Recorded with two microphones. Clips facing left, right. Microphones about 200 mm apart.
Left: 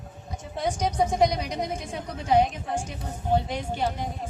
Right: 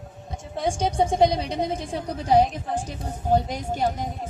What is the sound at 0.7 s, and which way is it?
A woman's voice, 30° right (ahead or behind).